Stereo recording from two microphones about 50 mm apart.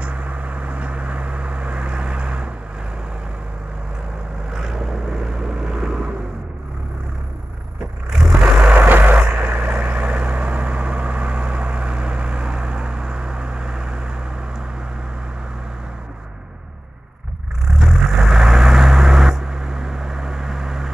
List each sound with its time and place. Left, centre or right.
0.0 s vehicle: right
4.5 s vehicle: centre
8.1 s vehicle: centre
8.8 s vehicle: right; by 14.1 s centre
17.6 s vehicle: centre